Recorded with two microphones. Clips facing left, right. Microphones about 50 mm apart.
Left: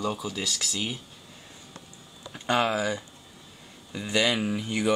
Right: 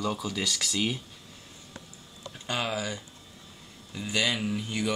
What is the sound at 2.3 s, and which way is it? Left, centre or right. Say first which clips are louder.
Speech: left 6 dB; left.